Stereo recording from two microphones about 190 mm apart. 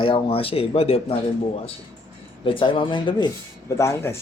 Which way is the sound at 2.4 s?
25° left (ahead or behind).